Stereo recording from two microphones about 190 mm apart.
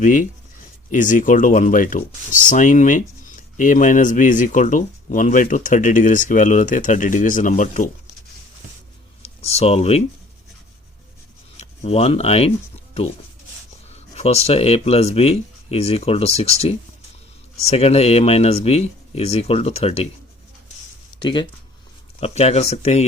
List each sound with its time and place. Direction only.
0.0 s speech: 45° left (ahead or behind)
9.2 s speech: 35° left (ahead or behind)
11.5 s speech: 35° left (ahead or behind)
13.9 s speech: 35° left (ahead or behind)
21.2 s speech: 25° left (ahead or behind)